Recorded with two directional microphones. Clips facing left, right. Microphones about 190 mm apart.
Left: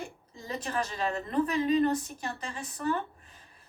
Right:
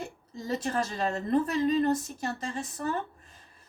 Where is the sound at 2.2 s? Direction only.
40° right (ahead or behind).